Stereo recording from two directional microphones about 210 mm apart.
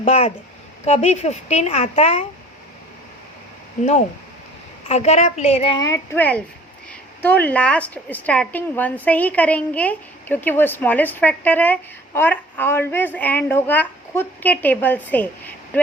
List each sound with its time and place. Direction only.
0.0 s a woman's voice: 30° left (ahead or behind)
4.9 s a child's voice: 30° left (ahead or behind); by 15.8 s 5° left (ahead or behind)